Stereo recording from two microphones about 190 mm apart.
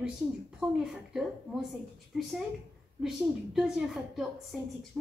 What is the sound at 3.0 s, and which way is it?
A woman's voice, centre (ahead or behind).